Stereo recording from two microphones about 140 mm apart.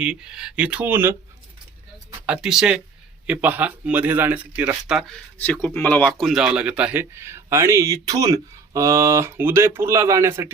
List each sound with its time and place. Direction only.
0.0 s a man's voice: 5° right (ahead or behind)
2.2 s a man's voice: 5° right (ahead or behind)
5.4 s speech: 15° left (ahead or behind)
6.1 s a man's voice: centre (ahead or behind); by 10.5 s 20° right (ahead or behind)